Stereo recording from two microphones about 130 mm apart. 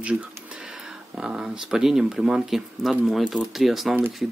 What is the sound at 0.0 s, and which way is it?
Speech, 10° right (ahead or behind).